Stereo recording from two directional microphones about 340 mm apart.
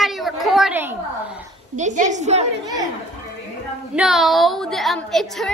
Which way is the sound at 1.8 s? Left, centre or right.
Right.